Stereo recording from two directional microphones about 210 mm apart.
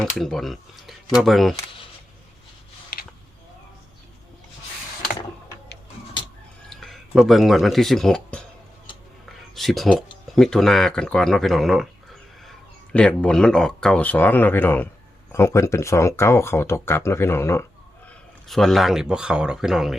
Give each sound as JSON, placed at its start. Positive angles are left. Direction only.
{"t": 0.0, "sound": "speech", "side_deg": 0}
{"t": 2.9, "sound": "a sound", "side_deg": 45}
{"t": 6.7, "sound": "speech", "side_deg": 0}
{"t": 9.6, "sound": "speech", "side_deg": 0}
{"t": 18.4, "sound": "speech", "side_deg": 0}